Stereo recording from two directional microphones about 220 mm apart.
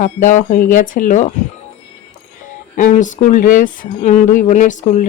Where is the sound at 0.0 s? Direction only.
35° left (ahead or behind).